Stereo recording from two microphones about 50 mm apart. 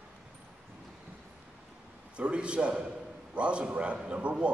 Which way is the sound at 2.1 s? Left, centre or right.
Right.